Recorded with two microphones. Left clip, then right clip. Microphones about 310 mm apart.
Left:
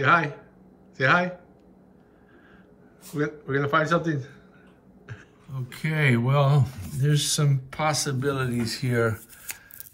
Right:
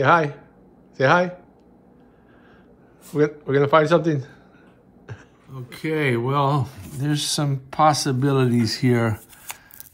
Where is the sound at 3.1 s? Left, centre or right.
Centre.